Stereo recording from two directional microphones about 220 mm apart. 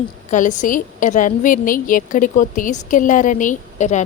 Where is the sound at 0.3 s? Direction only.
35° left (ahead or behind).